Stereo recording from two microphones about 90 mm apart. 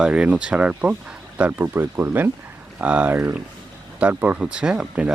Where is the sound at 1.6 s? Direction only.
25° right (ahead or behind).